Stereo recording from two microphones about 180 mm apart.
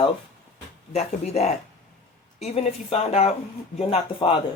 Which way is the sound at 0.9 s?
35° left (ahead or behind).